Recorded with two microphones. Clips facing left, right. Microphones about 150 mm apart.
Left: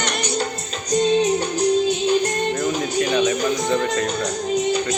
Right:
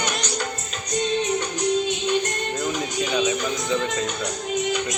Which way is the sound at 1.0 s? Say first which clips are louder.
Left 6 dB; 35° left (ahead or behind).